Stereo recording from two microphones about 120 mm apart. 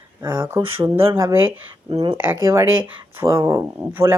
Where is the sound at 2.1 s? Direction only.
20° right (ahead or behind).